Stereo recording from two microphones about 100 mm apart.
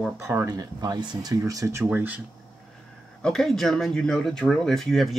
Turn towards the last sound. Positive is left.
turn(degrees=0)  # may be behind; listen again after turning